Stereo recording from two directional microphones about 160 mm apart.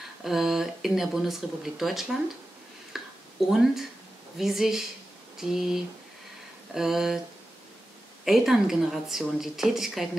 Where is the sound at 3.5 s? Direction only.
Centre (ahead or behind).